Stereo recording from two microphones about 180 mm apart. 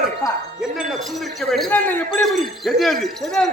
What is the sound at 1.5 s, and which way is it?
A man's voice, 5° left (ahead or behind).